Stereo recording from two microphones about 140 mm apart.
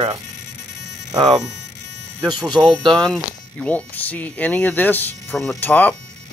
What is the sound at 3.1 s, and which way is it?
Speech, 10° left (ahead or behind).